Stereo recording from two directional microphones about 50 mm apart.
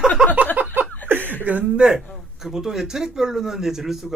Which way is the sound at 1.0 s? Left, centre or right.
Right.